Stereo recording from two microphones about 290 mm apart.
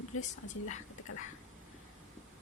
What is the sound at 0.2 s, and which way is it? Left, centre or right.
Speech, left.